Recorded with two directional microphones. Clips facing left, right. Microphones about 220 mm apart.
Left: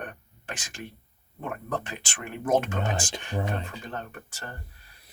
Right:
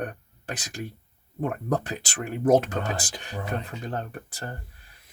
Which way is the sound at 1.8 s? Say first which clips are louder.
Right 5 dB; 40° right (ahead or behind).